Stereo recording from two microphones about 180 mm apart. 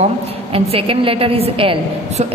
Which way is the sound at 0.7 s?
30° right (ahead or behind).